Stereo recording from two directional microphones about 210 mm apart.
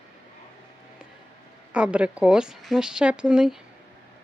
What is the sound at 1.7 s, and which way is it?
Speech, 5° right (ahead or behind).